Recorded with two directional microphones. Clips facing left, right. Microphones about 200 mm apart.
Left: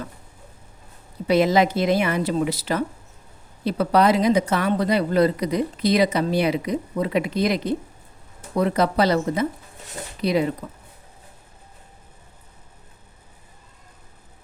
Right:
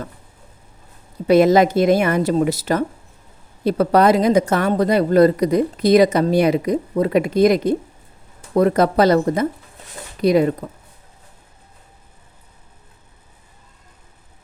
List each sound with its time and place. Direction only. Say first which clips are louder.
1.3 s speech: right 5 dB; 50° right (ahead or behind)